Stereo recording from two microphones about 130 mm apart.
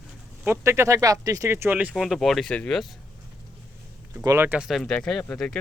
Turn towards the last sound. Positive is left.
turn(degrees=10)  # may be behind; listen again after turning